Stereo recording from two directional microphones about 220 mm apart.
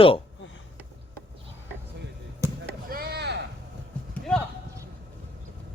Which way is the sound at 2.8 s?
45° right (ahead or behind).